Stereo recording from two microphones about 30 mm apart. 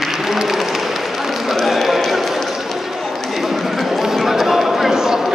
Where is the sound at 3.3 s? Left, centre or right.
Centre.